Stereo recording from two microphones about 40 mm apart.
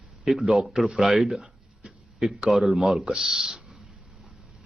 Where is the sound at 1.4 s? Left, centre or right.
Right.